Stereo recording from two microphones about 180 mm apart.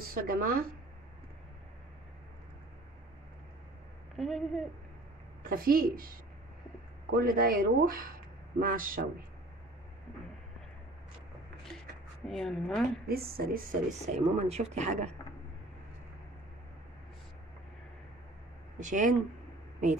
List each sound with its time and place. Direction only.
0.1 s a woman's voice: 55° right (ahead or behind)
4.2 s a woman's voice: centre (ahead or behind)
5.5 s speech: 55° right (ahead or behind)
12.3 s a woman's voice: 5° left (ahead or behind)
13.1 s a woman's voice: 60° right (ahead or behind)
14.0 s speech: 35° right (ahead or behind)
18.8 s speech: 45° right (ahead or behind)